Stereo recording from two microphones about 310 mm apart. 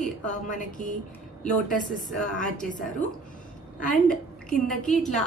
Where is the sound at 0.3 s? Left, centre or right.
Left.